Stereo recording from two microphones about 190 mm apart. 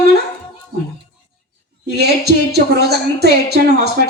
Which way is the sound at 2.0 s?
60° right (ahead or behind).